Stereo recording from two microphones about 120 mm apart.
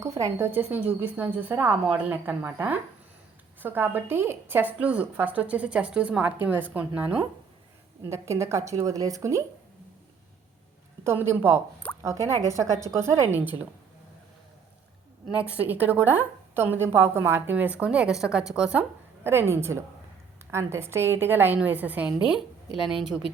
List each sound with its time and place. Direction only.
0.0 s a woman's voice: 25° right (ahead or behind)
8.0 s a woman's voice: 25° right (ahead or behind)
11.0 s a woman's voice: 20° right (ahead or behind)
15.3 s a woman's voice: 10° right (ahead or behind)
19.2 s a woman's voice: 20° right (ahead or behind); by 23.2 s 5° right (ahead or behind)